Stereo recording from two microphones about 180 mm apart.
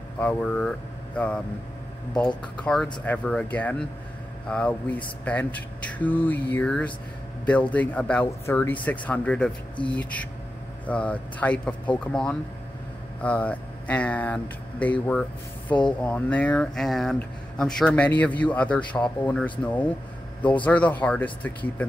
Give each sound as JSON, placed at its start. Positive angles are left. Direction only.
{"t": 0.2, "sound": "speech", "side_deg": 5}
{"t": 9.8, "sound": "speech", "side_deg": 25}
{"t": 10.9, "sound": "speech", "side_deg": 5}